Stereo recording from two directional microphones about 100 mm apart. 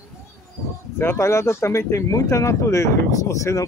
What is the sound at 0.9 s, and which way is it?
Speech, 25° left (ahead or behind).